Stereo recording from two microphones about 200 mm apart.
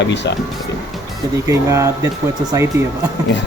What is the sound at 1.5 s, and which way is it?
Speech, 15° right (ahead or behind).